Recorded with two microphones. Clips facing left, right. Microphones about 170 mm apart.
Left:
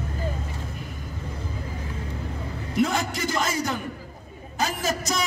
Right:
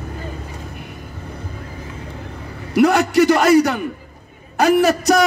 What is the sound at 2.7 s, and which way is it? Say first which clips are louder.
A man's voice: right 10 dB; 70° right (ahead or behind).